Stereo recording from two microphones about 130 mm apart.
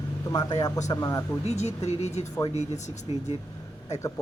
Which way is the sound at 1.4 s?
60° left (ahead or behind).